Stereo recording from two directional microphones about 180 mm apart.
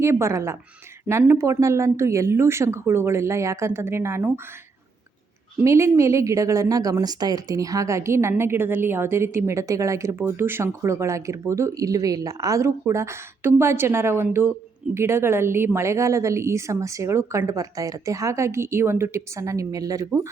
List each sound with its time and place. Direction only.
0.0 s a woman's voice: 15° right (ahead or behind)
5.6 s a woman's voice: 15° right (ahead or behind)